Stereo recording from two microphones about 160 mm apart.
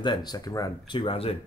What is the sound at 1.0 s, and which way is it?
Speech, 35° left (ahead or behind).